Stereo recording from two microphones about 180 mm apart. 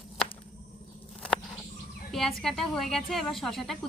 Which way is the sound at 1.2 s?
5° left (ahead or behind).